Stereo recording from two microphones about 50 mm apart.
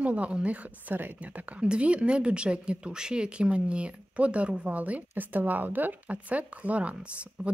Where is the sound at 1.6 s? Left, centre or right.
Right.